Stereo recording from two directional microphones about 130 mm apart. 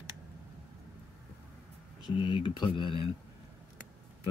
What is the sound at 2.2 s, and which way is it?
Speech, 40° left (ahead or behind).